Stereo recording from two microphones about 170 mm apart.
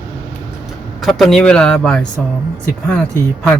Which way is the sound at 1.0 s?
Centre (ahead or behind).